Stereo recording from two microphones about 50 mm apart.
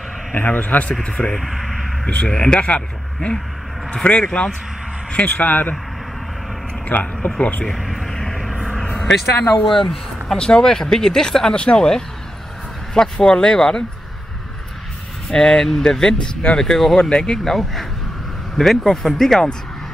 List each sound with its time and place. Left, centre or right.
0.3 s speech: left
1.0 s speech: centre
1.3 s speech: centre
2.0 s speech: left
5.1 s speech: left
7.2 s speech: centre
7.6 s a sound: centre
8.5 s vehicle: centre
8.9 s speech: centre
15.2 s speech: centre
17.1 s speech: centre
17.4 s speech: centre